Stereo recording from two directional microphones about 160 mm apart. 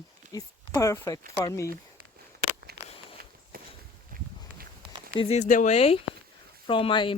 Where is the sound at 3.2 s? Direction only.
65° right (ahead or behind).